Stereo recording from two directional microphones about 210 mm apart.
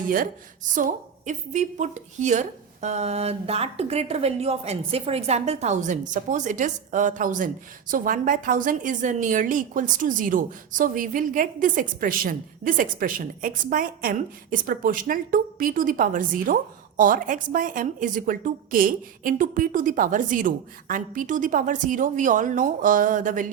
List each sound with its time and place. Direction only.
0.7 s a woman's voice: 35° right (ahead or behind)